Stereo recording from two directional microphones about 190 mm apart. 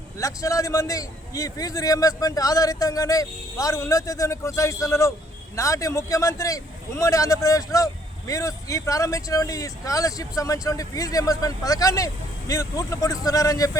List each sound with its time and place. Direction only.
0.2 s speech: 15° left (ahead or behind)